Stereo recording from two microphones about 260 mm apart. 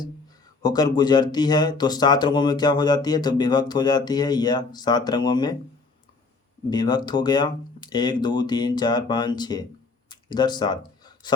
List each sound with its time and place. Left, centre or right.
0.6 s speech: centre
6.7 s speech: centre
10.1 s a sound: centre